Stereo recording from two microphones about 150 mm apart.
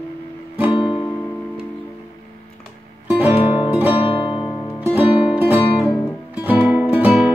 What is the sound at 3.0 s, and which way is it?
Music, 10° right (ahead or behind).